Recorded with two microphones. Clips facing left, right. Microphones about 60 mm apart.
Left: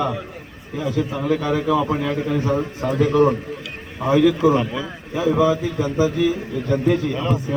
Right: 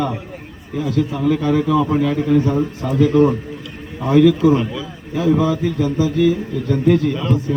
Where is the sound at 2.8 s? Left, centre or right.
Left.